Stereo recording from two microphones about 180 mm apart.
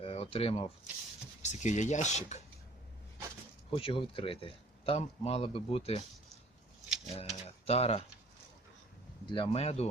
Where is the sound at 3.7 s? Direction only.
30° left (ahead or behind).